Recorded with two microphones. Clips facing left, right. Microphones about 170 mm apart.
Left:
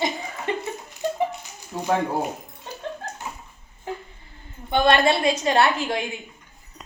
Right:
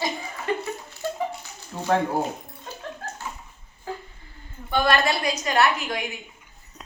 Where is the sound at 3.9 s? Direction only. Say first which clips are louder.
Left 2 dB; 20° left (ahead or behind).